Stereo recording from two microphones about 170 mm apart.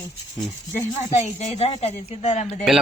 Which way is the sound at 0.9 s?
40° left (ahead or behind).